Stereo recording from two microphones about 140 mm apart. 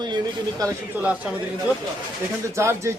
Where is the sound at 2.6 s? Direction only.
20° right (ahead or behind).